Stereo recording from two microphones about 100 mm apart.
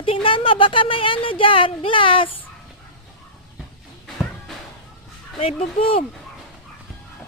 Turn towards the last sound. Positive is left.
turn(degrees=75)  # may be behind; listen again after turning